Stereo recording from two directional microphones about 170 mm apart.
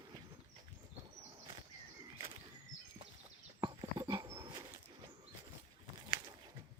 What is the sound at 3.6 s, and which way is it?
Dog, 25° right (ahead or behind).